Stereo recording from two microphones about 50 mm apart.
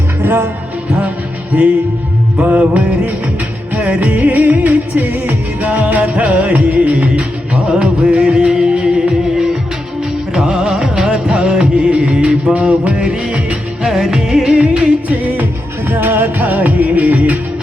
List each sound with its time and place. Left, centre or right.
0.2 s music: right
2.4 s music: right
13.8 s music: centre
15.1 s music: right
15.9 s music: right